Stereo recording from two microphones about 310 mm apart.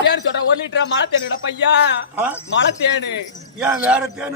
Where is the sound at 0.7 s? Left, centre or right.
Left.